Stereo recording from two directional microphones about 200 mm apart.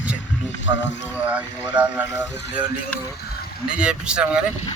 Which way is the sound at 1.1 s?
5° right (ahead or behind).